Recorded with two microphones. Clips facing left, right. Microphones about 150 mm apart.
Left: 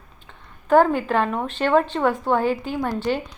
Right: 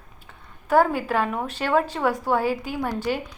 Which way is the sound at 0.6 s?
10° right (ahead or behind).